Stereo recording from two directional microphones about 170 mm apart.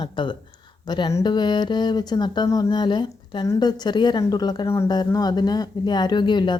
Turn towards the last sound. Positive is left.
turn(degrees=25)  # may be behind; listen again after turning